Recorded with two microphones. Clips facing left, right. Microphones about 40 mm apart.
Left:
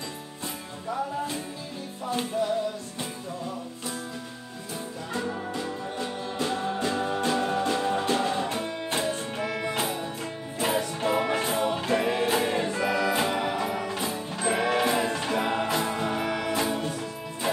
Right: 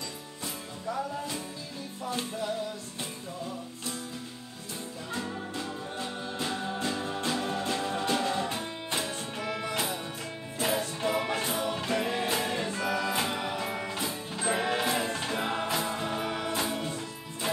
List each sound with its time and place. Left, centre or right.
2.0 s music: centre
5.1 s music: centre
11.0 s music: centre